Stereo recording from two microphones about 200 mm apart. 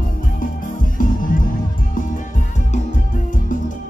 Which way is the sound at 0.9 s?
40° left (ahead or behind).